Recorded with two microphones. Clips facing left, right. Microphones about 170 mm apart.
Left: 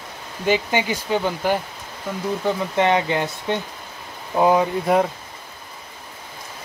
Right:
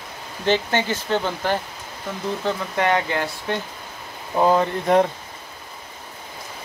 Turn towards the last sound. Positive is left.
turn(degrees=5)  # may be behind; listen again after turning